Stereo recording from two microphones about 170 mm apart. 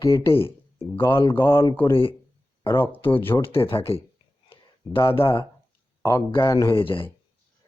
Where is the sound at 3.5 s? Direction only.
35° left (ahead or behind).